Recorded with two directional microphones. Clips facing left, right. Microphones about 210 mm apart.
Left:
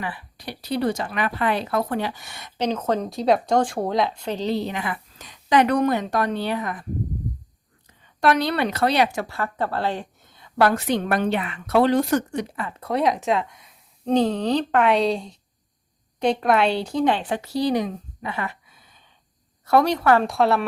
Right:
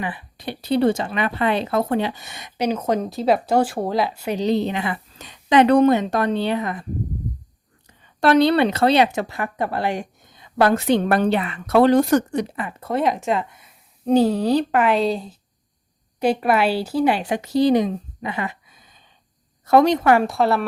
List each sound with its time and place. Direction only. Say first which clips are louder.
0.0 s speech: right 4 dB; 20° right (ahead or behind)
8.2 s speech: right 5 dB; 30° right (ahead or behind)
12.7 s a woman's voice: even; centre (ahead or behind); by 20.2 s 20° right (ahead or behind)
20.2 s speech: right 1 dB; centre (ahead or behind)